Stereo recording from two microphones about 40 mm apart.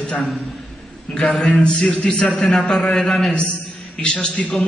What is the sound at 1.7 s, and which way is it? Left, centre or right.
Music, centre.